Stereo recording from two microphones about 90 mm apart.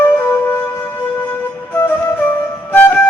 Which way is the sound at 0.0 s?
25° left (ahead or behind).